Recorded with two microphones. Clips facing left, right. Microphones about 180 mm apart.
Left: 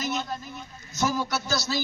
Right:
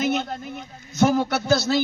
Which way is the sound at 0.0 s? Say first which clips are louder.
Right 6 dB; 60° right (ahead or behind).